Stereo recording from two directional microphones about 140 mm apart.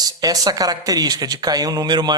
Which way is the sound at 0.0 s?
25° right (ahead or behind).